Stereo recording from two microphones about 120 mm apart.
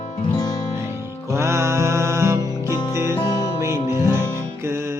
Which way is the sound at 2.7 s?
35° left (ahead or behind).